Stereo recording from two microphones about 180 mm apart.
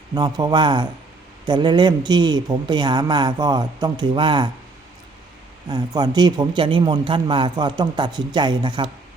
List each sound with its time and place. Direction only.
0.1 s a man's voice: 25° right (ahead or behind)
5.6 s a man's voice: 20° right (ahead or behind)